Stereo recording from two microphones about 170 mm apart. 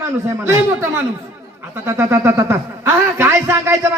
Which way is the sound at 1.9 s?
15° right (ahead or behind).